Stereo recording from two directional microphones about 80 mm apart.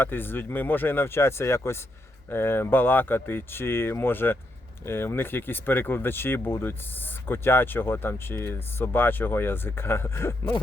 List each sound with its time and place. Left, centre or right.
0.0 s speech: left